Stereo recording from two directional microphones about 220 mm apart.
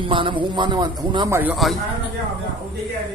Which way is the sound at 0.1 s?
20° right (ahead or behind).